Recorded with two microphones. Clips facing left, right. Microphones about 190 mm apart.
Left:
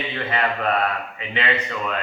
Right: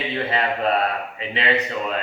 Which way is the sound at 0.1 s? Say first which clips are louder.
Right 1 dB; 30° right (ahead or behind).